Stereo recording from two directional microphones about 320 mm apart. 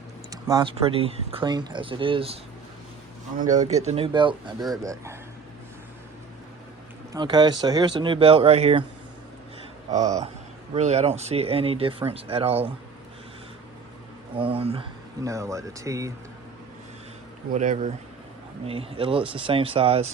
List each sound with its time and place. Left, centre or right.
0.4 s speech: centre
3.5 s speech: right
7.1 s speech: centre
9.9 s speech: centre
14.3 s speech: centre
17.5 s speech: right